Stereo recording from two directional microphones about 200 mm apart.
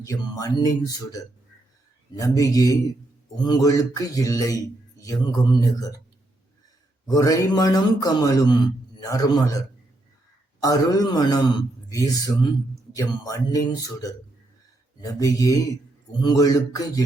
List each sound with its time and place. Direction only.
0.0 s speech: 15° left (ahead or behind)
7.1 s a man's voice: 20° left (ahead or behind)